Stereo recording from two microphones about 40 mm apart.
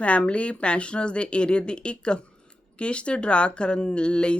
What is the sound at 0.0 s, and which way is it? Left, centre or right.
Speech, left.